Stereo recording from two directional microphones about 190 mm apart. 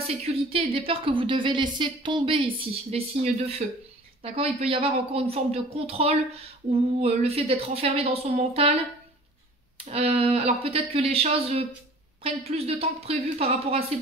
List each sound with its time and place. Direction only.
0.0 s a woman's voice: 30° right (ahead or behind)
9.8 s a woman's voice: 35° right (ahead or behind)